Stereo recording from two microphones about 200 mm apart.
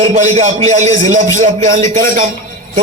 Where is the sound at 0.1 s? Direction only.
35° right (ahead or behind).